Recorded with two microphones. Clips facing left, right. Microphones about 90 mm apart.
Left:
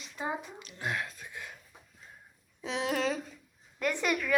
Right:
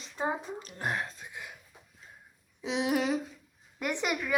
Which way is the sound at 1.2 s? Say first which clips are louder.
Even; 15° right (ahead or behind).